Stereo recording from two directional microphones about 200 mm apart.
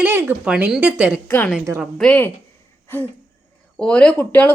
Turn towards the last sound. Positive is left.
turn(degrees=10)  # may be behind; listen again after turning